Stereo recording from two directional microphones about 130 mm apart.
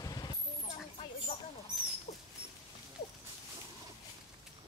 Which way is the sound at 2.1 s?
55° left (ahead or behind).